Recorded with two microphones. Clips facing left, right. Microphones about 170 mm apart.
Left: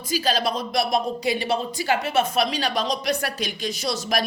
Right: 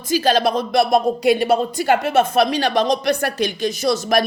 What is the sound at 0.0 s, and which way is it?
Speech, 50° right (ahead or behind).